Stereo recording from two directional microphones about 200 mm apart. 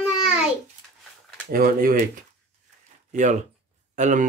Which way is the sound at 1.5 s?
45° right (ahead or behind).